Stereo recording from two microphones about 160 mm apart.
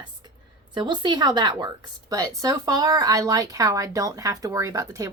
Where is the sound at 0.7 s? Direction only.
30° right (ahead or behind).